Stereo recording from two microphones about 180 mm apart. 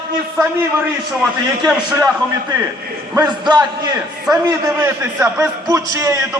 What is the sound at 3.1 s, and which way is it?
A man's voice, 25° right (ahead or behind).